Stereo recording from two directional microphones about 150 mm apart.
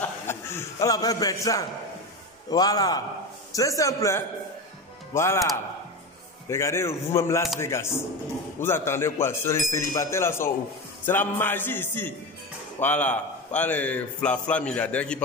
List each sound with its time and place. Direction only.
0.3 s a man's voice: 15° left (ahead or behind)
6.5 s a man's voice: 20° left (ahead or behind)